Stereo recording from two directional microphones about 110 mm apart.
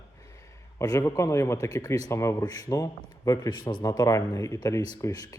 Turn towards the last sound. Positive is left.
turn(degrees=25)  # may be behind; listen again after turning